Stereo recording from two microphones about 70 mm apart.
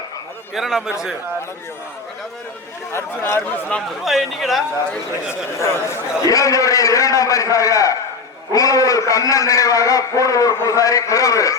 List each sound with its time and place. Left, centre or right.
0.5 s a man's voice: centre
2.9 s speech: left
4.0 s a man's voice: centre
5.3 s a man's voice: left